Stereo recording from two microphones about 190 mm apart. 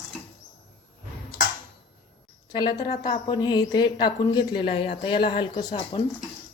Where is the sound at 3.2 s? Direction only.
20° left (ahead or behind).